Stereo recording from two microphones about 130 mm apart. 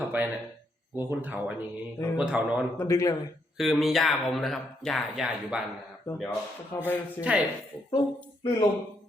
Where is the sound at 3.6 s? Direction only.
Centre (ahead or behind).